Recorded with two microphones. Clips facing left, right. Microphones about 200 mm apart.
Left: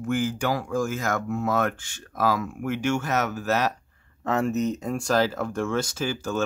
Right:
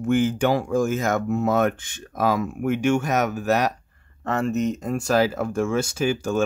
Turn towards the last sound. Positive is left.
turn(degrees=-15)  # may be behind; listen again after turning